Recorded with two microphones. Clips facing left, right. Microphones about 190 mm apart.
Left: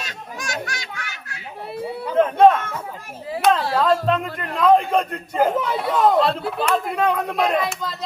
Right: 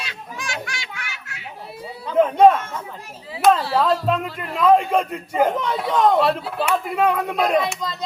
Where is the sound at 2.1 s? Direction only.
10° right (ahead or behind).